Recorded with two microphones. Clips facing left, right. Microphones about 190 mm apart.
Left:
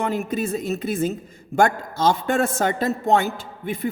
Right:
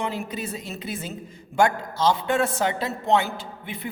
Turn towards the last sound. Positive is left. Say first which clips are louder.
# left 7 dB
turn(degrees=45)  # may be behind; listen again after turning